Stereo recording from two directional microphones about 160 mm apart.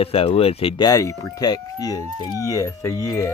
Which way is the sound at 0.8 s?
20° left (ahead or behind).